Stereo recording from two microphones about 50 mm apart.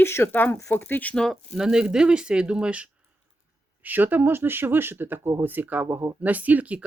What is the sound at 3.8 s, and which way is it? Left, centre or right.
Speech, right.